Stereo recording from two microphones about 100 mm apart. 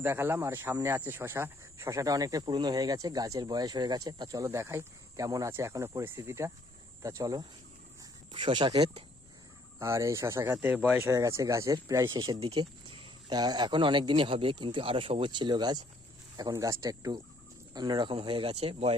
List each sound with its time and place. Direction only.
0.0 s speech: 25° right (ahead or behind)
4.4 s speech: 25° right (ahead or behind)
8.3 s speech: 55° right (ahead or behind)
9.7 s speech: 30° right (ahead or behind)
11.0 s speech: 30° right (ahead or behind)
12.1 s speech: 45° right (ahead or behind); by 18.9 s 80° right